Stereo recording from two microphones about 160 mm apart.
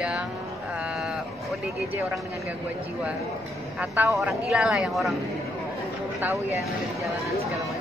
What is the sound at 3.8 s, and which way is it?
Speech, 15° right (ahead or behind).